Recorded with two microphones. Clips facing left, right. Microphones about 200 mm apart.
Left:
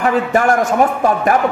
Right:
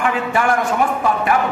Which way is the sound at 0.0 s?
40° left (ahead or behind).